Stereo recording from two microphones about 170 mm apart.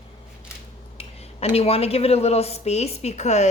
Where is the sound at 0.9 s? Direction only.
35° left (ahead or behind).